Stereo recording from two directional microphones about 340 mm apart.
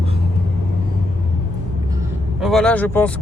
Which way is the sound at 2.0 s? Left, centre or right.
Centre.